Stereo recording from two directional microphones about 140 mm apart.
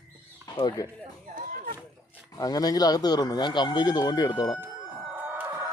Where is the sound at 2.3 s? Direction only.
25° left (ahead or behind).